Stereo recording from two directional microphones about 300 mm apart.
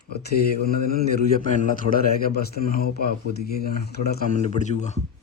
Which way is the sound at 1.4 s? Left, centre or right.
Left.